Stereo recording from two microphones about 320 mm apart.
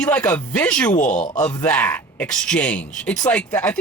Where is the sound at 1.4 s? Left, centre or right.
Centre.